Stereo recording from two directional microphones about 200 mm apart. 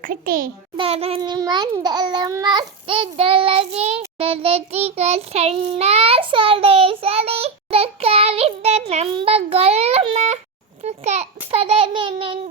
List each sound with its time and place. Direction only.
0.0 s a child's voice: 45° right (ahead or behind)
0.8 s child singing: 30° right (ahead or behind)
8.9 s a child's voice: 30° right (ahead or behind)
10.8 s child singing: 35° right (ahead or behind)